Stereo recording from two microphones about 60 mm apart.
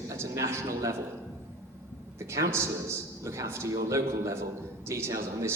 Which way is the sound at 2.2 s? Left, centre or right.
Right.